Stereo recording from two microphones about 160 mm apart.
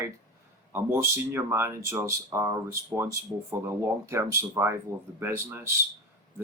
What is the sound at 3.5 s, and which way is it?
Speech, 15° right (ahead or behind).